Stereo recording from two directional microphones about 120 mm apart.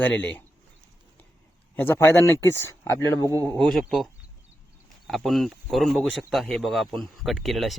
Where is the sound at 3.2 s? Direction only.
25° right (ahead or behind).